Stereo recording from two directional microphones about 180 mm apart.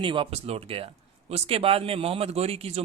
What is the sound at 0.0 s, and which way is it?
Speech, 30° right (ahead or behind).